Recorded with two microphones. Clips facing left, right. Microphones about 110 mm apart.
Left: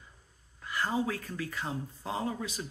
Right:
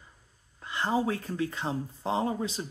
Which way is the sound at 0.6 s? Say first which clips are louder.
Right 2 dB; 25° right (ahead or behind).